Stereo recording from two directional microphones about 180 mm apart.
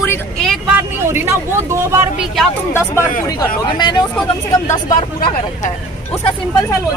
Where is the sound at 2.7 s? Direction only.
15° left (ahead or behind).